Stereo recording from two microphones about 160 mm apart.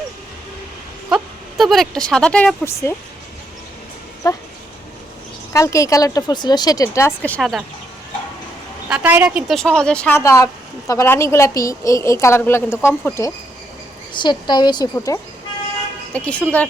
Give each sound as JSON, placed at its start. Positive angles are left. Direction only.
{"t": 1.1, "sound": "a woman's voice", "side_deg": 0}
{"t": 4.2, "sound": "speech", "side_deg": 20}
{"t": 5.5, "sound": "speech", "side_deg": 20}
{"t": 8.9, "sound": "a woman's voice", "side_deg": -10}
{"t": 9.6, "sound": "a woman's voice", "side_deg": 5}
{"t": 14.1, "sound": "speech", "side_deg": 30}
{"t": 16.1, "sound": "a woman's voice", "side_deg": 10}